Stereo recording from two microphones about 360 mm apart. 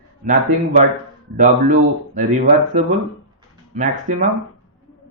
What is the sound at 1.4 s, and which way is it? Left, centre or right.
A man's voice, right.